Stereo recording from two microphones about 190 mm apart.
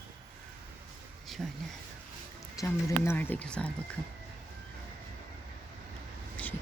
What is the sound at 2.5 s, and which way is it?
Speech, 15° left (ahead or behind).